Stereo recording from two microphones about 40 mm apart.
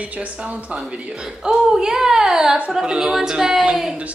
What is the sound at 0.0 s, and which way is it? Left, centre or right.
Speech, right.